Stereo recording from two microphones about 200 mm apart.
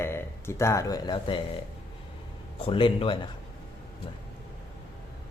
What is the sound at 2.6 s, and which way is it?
Speech, 25° left (ahead or behind).